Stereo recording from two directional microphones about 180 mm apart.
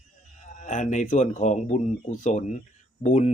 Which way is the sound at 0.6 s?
45° left (ahead or behind).